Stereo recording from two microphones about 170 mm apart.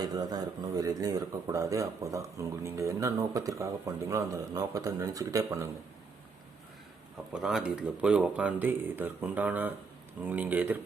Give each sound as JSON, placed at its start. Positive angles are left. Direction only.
{"t": 0.0, "sound": "speech", "side_deg": -25}
{"t": 7.3, "sound": "speech", "side_deg": -5}